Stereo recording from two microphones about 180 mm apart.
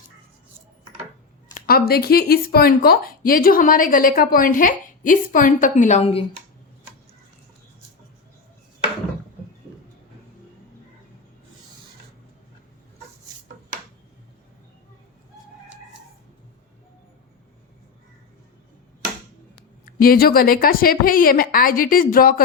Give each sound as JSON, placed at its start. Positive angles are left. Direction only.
{"t": 1.5, "sound": "speech", "side_deg": 55}
{"t": 19.5, "sound": "speech", "side_deg": 55}